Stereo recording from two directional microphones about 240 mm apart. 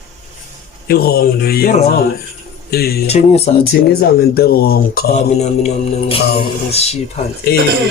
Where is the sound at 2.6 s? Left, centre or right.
Left.